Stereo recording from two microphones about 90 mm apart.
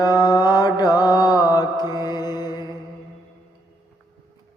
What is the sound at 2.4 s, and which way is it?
Music, 50° left (ahead or behind).